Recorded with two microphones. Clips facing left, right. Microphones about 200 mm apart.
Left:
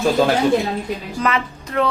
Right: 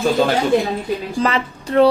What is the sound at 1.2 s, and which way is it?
Speech, 30° right (ahead or behind).